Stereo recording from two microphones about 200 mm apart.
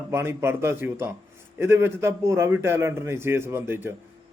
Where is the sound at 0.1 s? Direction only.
15° right (ahead or behind).